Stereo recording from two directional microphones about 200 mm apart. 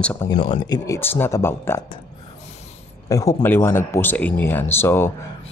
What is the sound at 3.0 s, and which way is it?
Speech, 15° left (ahead or behind).